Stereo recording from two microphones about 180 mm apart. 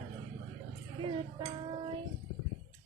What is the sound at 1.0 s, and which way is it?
Music, 30° right (ahead or behind).